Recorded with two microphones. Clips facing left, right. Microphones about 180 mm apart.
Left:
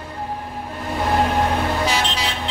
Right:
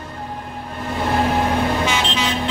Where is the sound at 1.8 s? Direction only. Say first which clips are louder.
Right 1 dB; 35° left (ahead or behind).